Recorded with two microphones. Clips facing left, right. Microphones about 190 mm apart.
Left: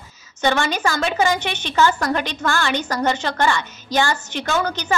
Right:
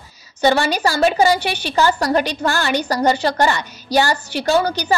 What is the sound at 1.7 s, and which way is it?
A woman's voice, 35° right (ahead or behind).